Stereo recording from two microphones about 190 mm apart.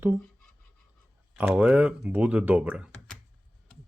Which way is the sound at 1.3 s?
10° right (ahead or behind).